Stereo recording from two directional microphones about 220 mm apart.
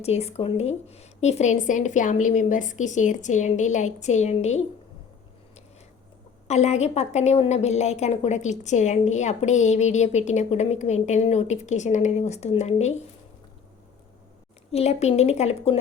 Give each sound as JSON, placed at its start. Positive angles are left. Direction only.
{"t": 0.0, "sound": "a woman's voice", "side_deg": 30}
{"t": 6.5, "sound": "a woman's voice", "side_deg": 30}
{"t": 14.7, "sound": "speech", "side_deg": 30}